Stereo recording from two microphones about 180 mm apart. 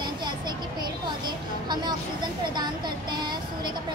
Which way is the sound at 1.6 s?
25° right (ahead or behind).